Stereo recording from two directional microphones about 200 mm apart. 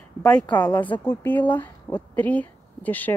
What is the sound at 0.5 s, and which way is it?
A woman's voice, 5° left (ahead or behind).